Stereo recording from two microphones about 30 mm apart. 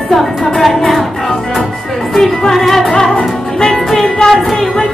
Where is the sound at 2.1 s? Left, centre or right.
Centre.